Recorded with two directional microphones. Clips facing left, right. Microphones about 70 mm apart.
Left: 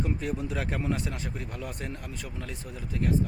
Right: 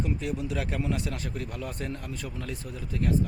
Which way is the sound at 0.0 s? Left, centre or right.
Left.